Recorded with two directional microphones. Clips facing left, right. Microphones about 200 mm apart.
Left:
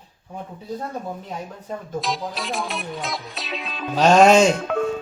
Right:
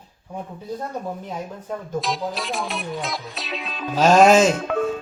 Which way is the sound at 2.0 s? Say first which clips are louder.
Right 1 dB; centre (ahead or behind).